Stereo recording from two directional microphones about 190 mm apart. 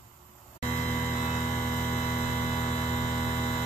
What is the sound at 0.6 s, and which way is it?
Mains hum, 40° left (ahead or behind).